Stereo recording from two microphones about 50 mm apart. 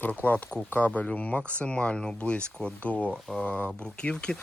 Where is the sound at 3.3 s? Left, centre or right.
Centre.